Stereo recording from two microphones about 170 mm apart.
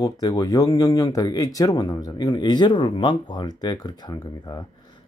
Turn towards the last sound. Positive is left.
turn(degrees=25)  # may be behind; listen again after turning